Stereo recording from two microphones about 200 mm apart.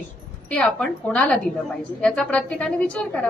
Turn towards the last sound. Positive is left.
turn(degrees=5)  # may be behind; listen again after turning